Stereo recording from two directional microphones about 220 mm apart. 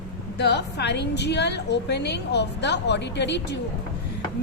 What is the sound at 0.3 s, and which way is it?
A woman's voice, 50° left (ahead or behind).